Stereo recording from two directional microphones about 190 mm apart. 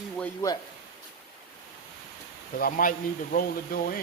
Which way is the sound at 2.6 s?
50° left (ahead or behind).